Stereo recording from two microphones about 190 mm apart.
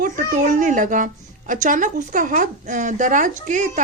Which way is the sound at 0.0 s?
45° right (ahead or behind).